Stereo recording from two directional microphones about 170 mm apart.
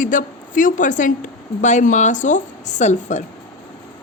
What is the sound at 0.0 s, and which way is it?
A woman's voice, 50° left (ahead or behind).